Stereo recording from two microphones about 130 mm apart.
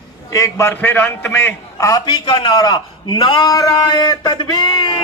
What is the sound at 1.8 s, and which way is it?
A man's voice, 30° left (ahead or behind).